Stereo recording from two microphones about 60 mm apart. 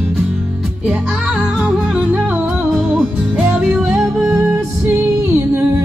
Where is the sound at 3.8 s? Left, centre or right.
Centre.